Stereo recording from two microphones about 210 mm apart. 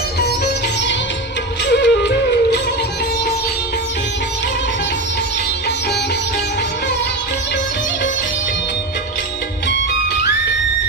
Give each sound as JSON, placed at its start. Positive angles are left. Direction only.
{"t": 0.4, "sound": "music", "side_deg": 55}